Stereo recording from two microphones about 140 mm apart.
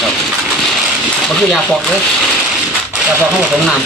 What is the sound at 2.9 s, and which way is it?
Speech, 5° right (ahead or behind).